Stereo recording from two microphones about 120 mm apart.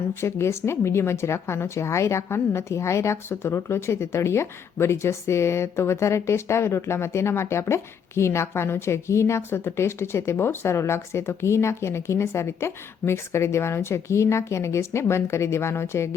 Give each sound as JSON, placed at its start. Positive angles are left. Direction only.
{"t": 0.1, "sound": "speech", "side_deg": 20}